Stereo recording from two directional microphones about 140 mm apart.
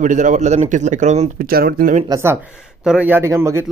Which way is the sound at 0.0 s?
65° right (ahead or behind).